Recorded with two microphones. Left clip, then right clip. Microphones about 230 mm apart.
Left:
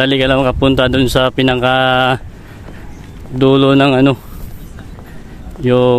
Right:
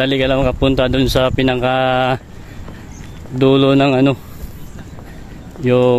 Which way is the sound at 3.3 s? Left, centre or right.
Centre.